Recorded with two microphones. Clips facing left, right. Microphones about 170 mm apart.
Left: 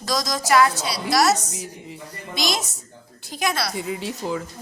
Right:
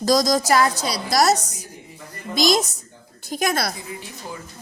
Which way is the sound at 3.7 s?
75° left (ahead or behind).